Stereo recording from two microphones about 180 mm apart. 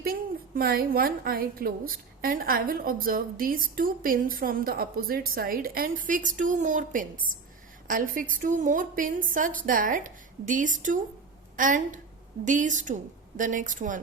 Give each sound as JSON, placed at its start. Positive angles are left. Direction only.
{"t": 0.0, "sound": "a woman's voice", "side_deg": -55}